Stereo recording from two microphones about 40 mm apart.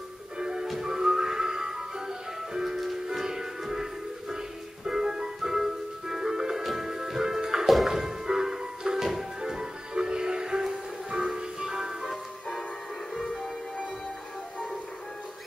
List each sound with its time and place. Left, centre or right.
0.4 s music: centre